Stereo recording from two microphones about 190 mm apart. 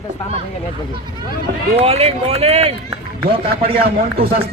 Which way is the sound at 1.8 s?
35° right (ahead or behind).